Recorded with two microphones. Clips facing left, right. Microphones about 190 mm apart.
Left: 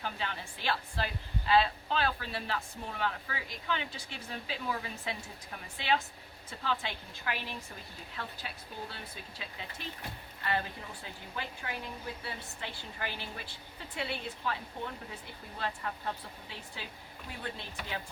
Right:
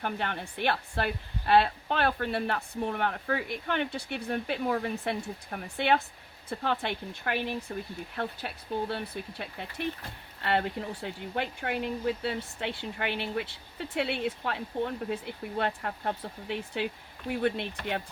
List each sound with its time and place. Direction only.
0.0 s a woman's voice: 60° right (ahead or behind)